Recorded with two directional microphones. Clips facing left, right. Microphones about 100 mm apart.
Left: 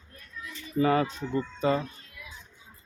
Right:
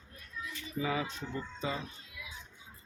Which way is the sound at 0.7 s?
60° left (ahead or behind).